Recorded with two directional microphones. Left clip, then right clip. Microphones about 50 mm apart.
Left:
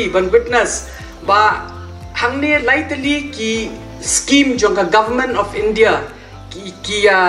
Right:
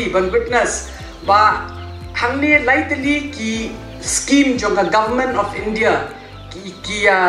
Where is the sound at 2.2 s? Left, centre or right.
Right.